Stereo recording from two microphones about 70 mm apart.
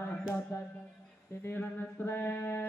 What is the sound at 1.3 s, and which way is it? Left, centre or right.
Mantra, left.